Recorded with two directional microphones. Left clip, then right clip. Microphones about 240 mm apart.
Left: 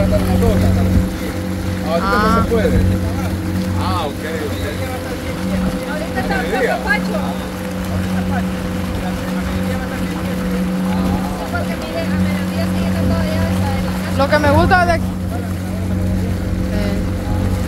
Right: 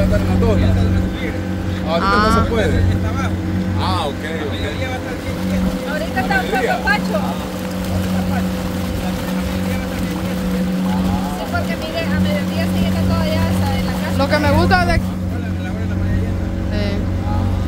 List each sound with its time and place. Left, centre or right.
2.0 s speech: centre
14.1 s speech: centre